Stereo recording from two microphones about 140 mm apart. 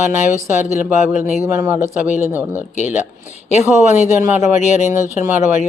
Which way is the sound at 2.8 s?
60° left (ahead or behind).